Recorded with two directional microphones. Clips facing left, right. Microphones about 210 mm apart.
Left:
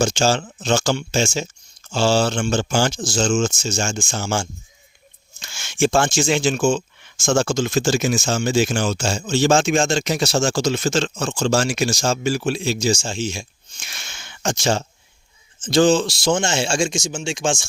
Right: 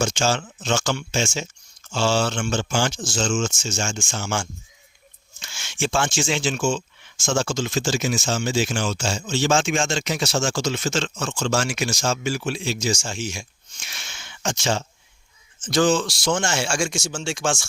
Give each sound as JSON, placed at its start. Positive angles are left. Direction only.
{"t": 0.0, "sound": "speech", "side_deg": 35}
{"t": 13.8, "sound": "speech", "side_deg": 45}
{"t": 15.6, "sound": "speech", "side_deg": 25}